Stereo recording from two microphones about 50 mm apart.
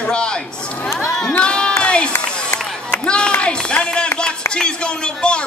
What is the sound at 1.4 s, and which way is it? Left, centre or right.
Speech, centre.